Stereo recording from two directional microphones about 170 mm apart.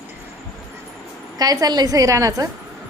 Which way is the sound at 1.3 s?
20° right (ahead or behind).